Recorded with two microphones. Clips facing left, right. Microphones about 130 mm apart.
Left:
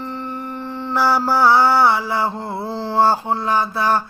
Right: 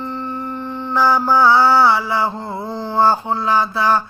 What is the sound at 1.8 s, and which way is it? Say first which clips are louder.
Mantra: right 1 dB; 55° left (ahead or behind).